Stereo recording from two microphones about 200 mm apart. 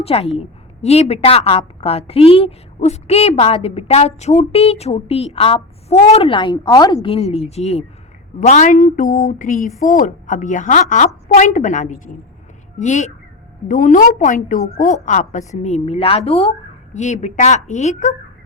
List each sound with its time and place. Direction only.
0.0 s a woman's voice: 30° left (ahead or behind)